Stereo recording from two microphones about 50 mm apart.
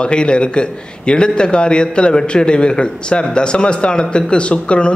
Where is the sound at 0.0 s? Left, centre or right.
Centre.